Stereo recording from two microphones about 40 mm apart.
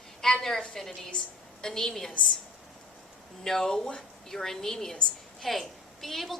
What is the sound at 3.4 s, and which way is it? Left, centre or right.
A woman's voice, centre.